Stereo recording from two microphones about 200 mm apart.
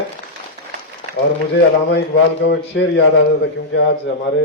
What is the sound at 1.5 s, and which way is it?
A man's voice, 60° left (ahead or behind).